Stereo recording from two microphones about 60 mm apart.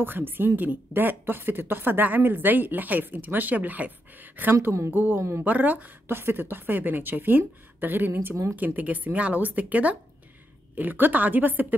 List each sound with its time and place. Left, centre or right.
0.0 s a woman's voice: right
8.5 s speech: right